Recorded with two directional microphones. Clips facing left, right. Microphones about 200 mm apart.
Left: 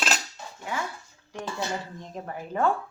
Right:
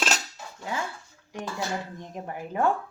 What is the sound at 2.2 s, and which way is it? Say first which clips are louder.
Speech: even; 15° right (ahead or behind).